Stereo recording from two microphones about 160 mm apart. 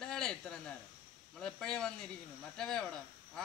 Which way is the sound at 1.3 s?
5° left (ahead or behind).